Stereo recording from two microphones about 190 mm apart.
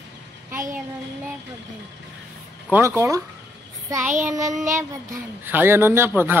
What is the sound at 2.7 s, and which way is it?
Speech, 15° right (ahead or behind).